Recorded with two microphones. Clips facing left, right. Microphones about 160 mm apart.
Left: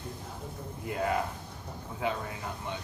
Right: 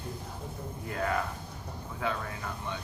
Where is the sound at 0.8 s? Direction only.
20° left (ahead or behind).